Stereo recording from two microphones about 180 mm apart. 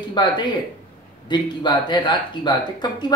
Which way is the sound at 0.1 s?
25° left (ahead or behind).